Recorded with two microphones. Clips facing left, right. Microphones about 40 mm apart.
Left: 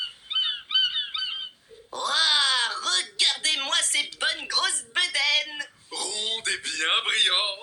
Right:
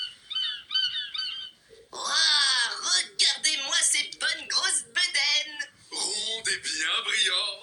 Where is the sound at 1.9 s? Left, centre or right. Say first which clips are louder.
Left 2 dB; left.